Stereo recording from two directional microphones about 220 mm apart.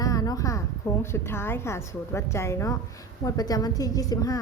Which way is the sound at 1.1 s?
10° left (ahead or behind).